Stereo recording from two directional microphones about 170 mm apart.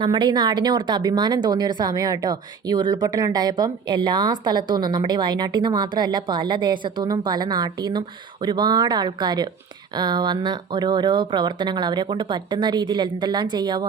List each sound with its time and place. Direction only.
0.0 s a woman's voice: 30° right (ahead or behind)